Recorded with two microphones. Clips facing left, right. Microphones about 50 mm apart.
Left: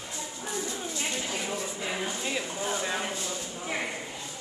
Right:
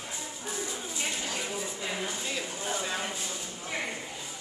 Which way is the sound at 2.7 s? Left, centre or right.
Centre.